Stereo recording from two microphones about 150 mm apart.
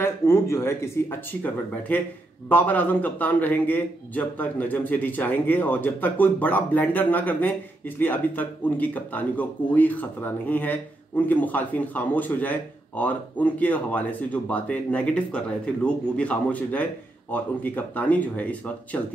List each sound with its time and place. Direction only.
0.0 s speech: 15° left (ahead or behind)